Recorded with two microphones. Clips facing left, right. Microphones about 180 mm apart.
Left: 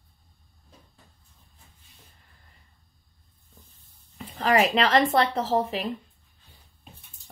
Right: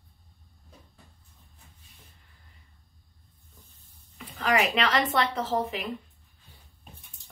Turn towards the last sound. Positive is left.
turn(degrees=30)  # may be behind; listen again after turning